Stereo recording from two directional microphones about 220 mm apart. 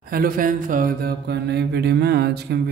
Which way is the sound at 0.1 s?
40° right (ahead or behind).